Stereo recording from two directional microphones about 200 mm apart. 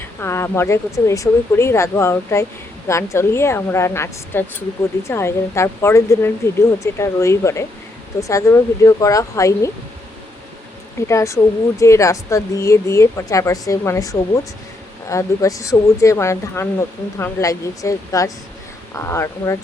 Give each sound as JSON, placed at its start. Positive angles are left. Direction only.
{"t": 0.0, "sound": "speech", "side_deg": 10}
{"t": 11.1, "sound": "speech", "side_deg": 15}